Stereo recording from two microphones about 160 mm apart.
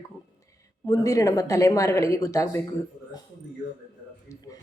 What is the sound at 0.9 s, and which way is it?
Speech, 20° left (ahead or behind).